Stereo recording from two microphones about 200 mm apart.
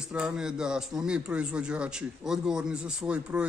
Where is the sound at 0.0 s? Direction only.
5° right (ahead or behind).